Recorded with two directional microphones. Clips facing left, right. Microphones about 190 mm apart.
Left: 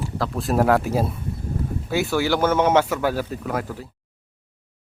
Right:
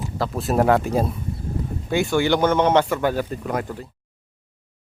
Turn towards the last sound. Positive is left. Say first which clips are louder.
# right 1 dB
turn(degrees=5)  # may be behind; listen again after turning